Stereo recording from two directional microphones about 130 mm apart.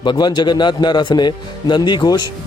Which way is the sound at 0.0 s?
35° left (ahead or behind).